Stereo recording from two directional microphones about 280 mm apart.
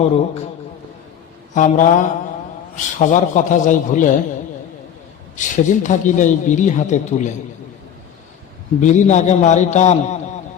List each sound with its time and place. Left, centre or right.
1.5 s speech: left
5.4 s speech: left
8.8 s speech: left